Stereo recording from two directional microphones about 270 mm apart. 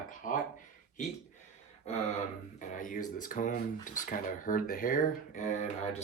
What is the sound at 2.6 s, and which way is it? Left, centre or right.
Speech, left.